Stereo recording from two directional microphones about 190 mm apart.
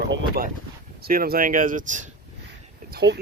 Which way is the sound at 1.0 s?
50° right (ahead or behind).